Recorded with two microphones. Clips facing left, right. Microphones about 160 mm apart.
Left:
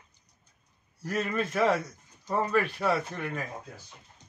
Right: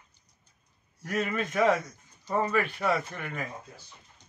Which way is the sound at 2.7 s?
Centre (ahead or behind).